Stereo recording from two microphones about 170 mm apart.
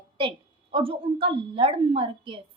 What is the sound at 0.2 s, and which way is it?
A woman's voice, 30° right (ahead or behind).